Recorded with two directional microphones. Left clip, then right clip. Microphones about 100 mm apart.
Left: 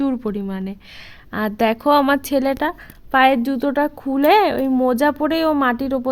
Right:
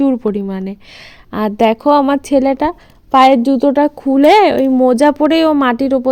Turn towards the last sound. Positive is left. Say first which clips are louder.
# right 6 dB
turn(degrees=-45)  # may be behind; listen again after turning